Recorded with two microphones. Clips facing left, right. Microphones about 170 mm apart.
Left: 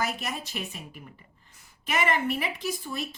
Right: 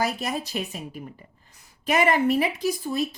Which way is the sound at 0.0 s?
35° right (ahead or behind).